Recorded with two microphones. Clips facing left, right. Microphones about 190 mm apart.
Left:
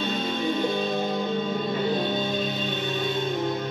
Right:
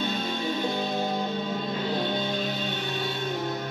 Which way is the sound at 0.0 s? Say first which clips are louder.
Left 2 dB; 20° left (ahead or behind).